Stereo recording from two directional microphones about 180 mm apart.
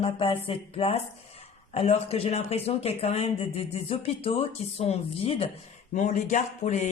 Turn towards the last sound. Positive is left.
turn(degrees=40)  # may be behind; listen again after turning